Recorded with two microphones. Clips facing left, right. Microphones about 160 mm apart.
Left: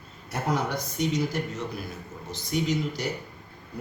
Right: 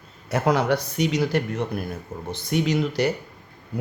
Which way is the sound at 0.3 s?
90° right.